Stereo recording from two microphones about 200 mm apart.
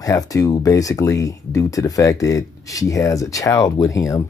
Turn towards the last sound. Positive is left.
turn(degrees=15)  # may be behind; listen again after turning